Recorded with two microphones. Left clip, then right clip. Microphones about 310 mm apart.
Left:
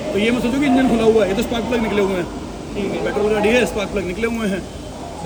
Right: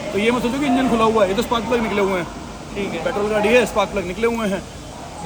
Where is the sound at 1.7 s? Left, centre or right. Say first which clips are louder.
Left 3 dB; centre.